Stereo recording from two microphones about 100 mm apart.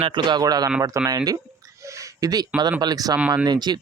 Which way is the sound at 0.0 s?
50° right (ahead or behind).